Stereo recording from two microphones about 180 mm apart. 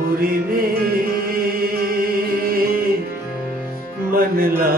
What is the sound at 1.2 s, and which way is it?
Music, 55° right (ahead or behind).